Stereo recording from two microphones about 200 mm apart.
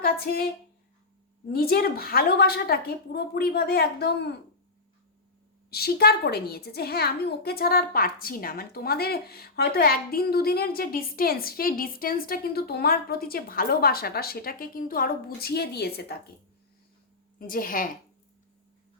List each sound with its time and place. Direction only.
0.0 s a woman's voice: 50° left (ahead or behind)
1.5 s a woman's voice: 50° left (ahead or behind)
5.7 s a woman's voice: 50° left (ahead or behind)
17.4 s a woman's voice: 45° left (ahead or behind)